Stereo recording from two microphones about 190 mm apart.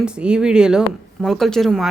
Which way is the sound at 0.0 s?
5° right (ahead or behind).